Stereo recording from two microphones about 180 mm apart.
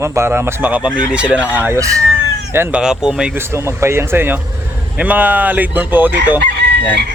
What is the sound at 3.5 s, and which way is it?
Speech, 15° right (ahead or behind).